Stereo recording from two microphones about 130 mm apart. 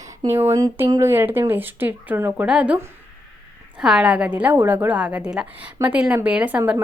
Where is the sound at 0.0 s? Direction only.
25° right (ahead or behind); by 2.7 s 10° right (ahead or behind).